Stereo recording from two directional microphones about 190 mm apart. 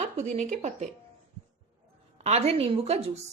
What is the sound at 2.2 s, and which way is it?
Speech, 35° right (ahead or behind).